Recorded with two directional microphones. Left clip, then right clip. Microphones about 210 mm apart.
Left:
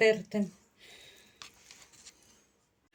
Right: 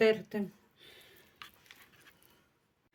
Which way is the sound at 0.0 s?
50° right (ahead or behind).